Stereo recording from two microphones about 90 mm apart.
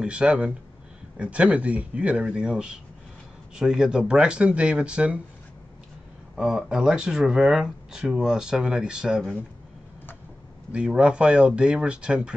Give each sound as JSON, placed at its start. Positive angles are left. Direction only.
{"t": 0.0, "sound": "speech", "side_deg": -10}
{"t": 6.3, "sound": "speech", "side_deg": -5}
{"t": 10.7, "sound": "speech", "side_deg": -10}